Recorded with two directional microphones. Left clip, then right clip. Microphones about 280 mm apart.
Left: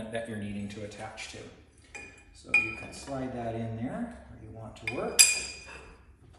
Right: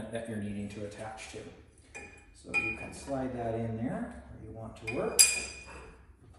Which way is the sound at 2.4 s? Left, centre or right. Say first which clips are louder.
Left 5 dB; centre.